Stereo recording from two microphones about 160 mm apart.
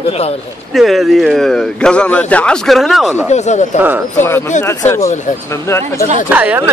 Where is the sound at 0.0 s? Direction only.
40° left (ahead or behind).